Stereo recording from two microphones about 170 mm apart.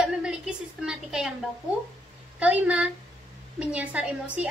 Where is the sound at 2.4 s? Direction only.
5° right (ahead or behind).